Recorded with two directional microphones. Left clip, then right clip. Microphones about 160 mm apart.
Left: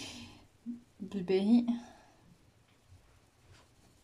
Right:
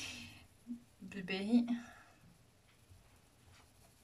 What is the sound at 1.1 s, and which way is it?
Speech, 25° left (ahead or behind).